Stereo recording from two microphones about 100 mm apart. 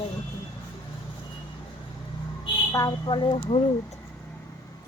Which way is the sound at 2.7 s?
40° left (ahead or behind).